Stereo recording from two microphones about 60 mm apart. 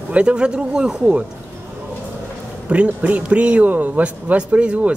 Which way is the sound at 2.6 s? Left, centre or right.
Right.